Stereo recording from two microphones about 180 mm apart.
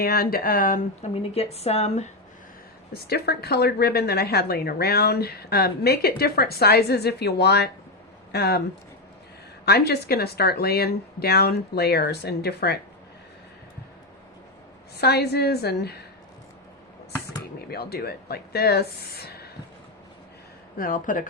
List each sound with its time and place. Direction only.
0.0 s speech: 60° left (ahead or behind)
1.1 s speech: 35° left (ahead or behind)
2.9 s a woman's voice: 60° left (ahead or behind)
9.6 s a woman's voice: 65° left (ahead or behind)
14.9 s a woman's voice: 65° left (ahead or behind)
17.7 s a woman's voice: 60° left (ahead or behind)
20.7 s speech: 50° left (ahead or behind)